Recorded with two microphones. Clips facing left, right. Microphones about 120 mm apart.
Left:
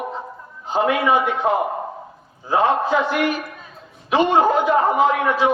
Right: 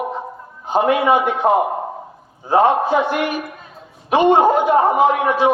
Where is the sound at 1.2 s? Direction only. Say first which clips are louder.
Right 4 dB; 55° right (ahead or behind).